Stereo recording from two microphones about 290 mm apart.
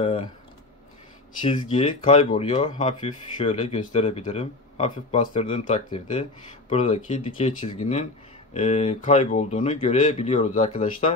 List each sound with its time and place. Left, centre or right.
1.4 s speech: centre